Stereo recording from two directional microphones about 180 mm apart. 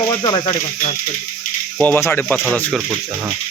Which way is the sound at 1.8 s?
15° left (ahead or behind).